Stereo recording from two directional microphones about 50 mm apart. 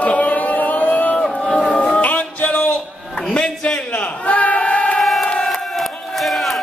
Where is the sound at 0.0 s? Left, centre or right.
Left.